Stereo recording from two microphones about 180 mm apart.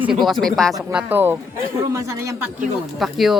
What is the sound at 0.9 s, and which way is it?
Speech, 10° right (ahead or behind).